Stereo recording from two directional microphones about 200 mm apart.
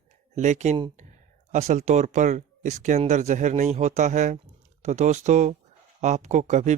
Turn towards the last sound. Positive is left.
turn(degrees=-35)  # may be behind; listen again after turning